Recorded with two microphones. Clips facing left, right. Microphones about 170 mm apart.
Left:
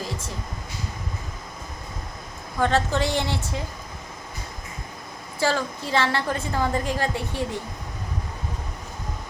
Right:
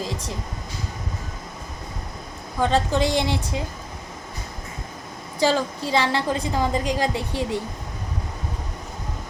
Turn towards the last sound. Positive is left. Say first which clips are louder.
# right 2 dB
turn(degrees=-15)  # may be behind; listen again after turning